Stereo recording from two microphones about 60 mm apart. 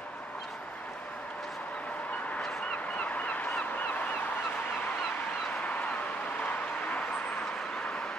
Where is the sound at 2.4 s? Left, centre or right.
Centre.